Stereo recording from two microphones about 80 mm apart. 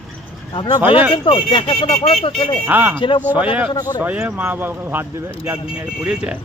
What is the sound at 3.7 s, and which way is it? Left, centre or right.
Speech, left.